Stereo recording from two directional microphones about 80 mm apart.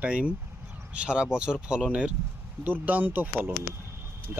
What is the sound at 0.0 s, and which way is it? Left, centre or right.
Speech, centre.